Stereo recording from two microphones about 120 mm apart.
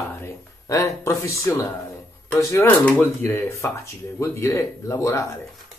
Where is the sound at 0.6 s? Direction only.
25° left (ahead or behind).